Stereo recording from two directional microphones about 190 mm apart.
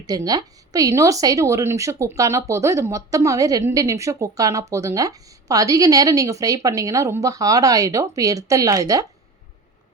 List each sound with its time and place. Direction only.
0.0 s a woman's voice: 20° right (ahead or behind)